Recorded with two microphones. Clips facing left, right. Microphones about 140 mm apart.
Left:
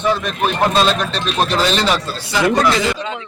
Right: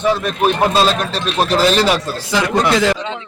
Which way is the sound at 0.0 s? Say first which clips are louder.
Right 2 dB; 10° right (ahead or behind).